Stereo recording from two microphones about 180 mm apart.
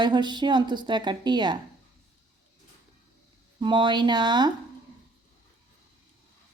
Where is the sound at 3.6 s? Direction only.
25° right (ahead or behind).